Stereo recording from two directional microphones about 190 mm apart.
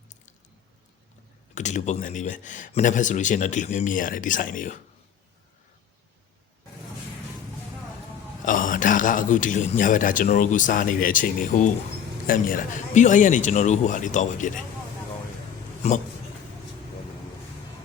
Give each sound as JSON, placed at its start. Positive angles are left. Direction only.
{"t": 1.5, "sound": "speech", "side_deg": 40}
{"t": 8.4, "sound": "a man's voice", "side_deg": 45}
{"t": 15.8, "sound": "speech", "side_deg": 35}